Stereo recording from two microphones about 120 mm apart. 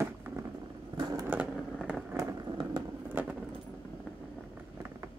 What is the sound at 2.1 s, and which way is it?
Vehicle, 30° right (ahead or behind).